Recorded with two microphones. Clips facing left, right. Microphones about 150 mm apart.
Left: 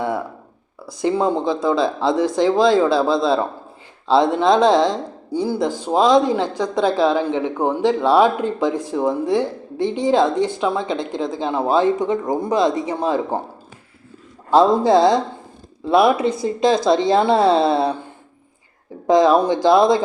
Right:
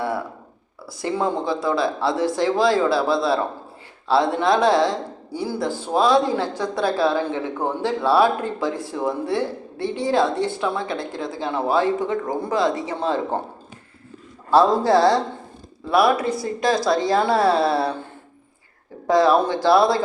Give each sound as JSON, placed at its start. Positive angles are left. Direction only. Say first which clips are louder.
{"t": 0.9, "sound": "speech", "louder": "left 5 dB", "side_deg": 20}
{"t": 14.5, "sound": "speech", "louder": "left 2 dB", "side_deg": 20}
{"t": 19.0, "sound": "speech", "louder": "left 3 dB", "side_deg": 20}